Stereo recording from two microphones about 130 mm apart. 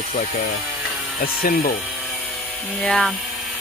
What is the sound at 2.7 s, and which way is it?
Speech, 10° left (ahead or behind).